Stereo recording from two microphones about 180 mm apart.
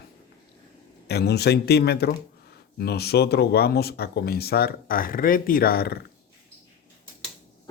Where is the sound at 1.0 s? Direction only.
65° left (ahead or behind).